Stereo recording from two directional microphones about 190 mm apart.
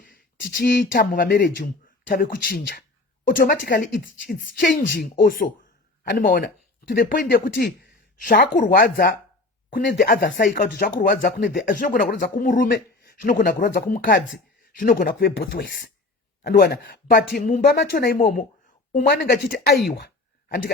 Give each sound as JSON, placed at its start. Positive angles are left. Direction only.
{"t": 0.0, "sound": "a woman's voice", "side_deg": 50}
{"t": 19.1, "sound": "speech", "side_deg": 55}